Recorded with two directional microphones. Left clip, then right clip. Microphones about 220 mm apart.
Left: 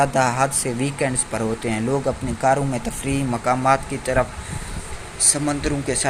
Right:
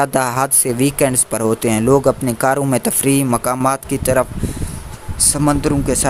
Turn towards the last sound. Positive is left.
turn(degrees=-45)  # may be behind; listen again after turning